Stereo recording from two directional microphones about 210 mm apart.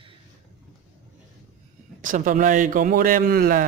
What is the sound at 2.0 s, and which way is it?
A man's voice, 40° right (ahead or behind).